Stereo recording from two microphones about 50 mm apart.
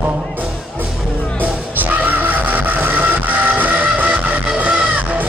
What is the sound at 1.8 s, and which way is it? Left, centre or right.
Music, right.